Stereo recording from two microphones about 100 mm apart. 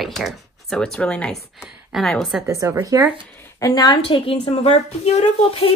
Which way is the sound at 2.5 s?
30° right (ahead or behind).